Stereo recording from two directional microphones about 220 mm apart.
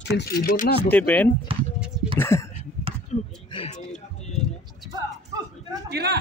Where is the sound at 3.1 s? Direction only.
30° left (ahead or behind).